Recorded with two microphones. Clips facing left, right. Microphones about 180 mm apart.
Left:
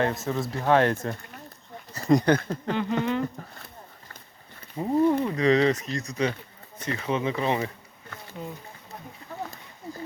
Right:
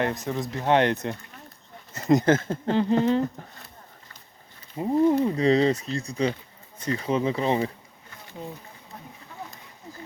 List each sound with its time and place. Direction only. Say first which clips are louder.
0.0 s speech: left 1 dB; 15° right (ahead or behind); by 3.2 s 30° right (ahead or behind)
5.0 s speech: right 2 dB; 30° right (ahead or behind)